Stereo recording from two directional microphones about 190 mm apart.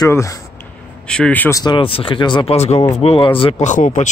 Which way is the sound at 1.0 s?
5° left (ahead or behind).